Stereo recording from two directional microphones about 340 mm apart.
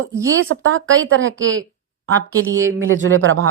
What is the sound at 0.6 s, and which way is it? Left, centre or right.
Speech, right.